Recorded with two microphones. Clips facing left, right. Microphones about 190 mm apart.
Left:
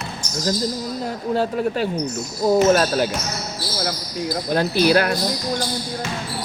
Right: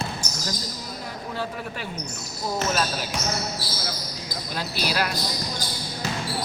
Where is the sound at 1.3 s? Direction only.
40° left (ahead or behind).